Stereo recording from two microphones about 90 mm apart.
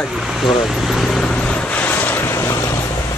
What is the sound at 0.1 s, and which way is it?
Speech, 5° right (ahead or behind).